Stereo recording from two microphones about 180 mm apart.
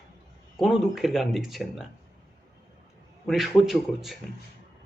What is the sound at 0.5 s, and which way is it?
A man's voice, centre (ahead or behind).